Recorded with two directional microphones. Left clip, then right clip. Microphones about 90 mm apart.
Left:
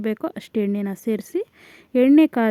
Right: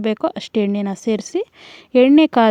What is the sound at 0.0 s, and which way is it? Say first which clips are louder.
Speech: right 6 dB; 30° right (ahead or behind).